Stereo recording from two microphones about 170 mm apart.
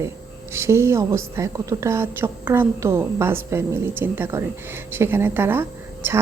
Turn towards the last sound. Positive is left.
turn(degrees=-10)  # may be behind; listen again after turning